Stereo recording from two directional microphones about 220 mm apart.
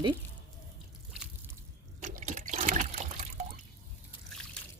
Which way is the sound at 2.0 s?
35° right (ahead or behind).